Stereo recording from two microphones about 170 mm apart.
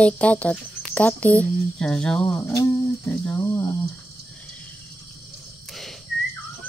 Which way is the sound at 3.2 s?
15° left (ahead or behind).